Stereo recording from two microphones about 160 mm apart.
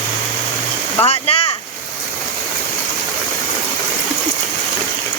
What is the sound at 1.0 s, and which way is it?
Speech, 40° left (ahead or behind).